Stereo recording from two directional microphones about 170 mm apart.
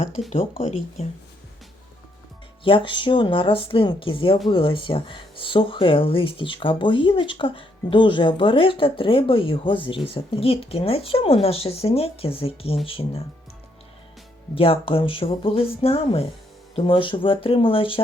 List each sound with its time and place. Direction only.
0.2 s speech: 30° left (ahead or behind)
2.6 s speech: 30° left (ahead or behind)
14.5 s speech: 30° left (ahead or behind)